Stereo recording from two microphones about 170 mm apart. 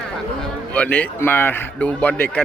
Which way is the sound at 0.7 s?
10° left (ahead or behind).